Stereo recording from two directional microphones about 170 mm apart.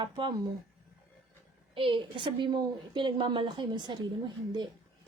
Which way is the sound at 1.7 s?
30° right (ahead or behind).